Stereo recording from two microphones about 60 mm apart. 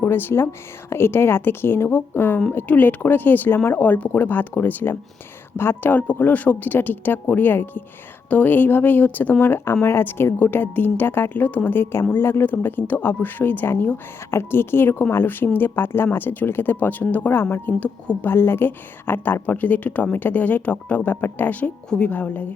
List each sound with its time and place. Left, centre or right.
0.0 s a woman's voice: left
17.8 s a woman's voice: centre
18.3 s a woman's voice: left
21.8 s a woman's voice: centre
22.1 s a woman's voice: left